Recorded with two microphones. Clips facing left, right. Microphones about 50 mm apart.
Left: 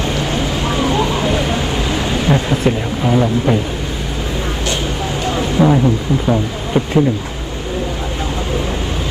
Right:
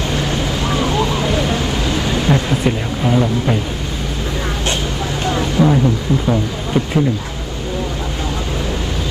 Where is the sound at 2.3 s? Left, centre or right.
Centre.